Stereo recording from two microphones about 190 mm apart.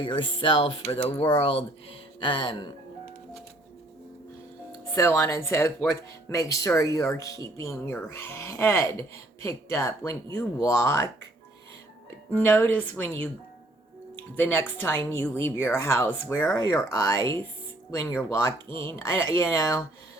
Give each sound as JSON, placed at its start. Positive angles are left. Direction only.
{"t": 0.0, "sound": "speech", "side_deg": 25}
{"t": 4.9, "sound": "speech", "side_deg": 15}
{"t": 12.3, "sound": "speech", "side_deg": 10}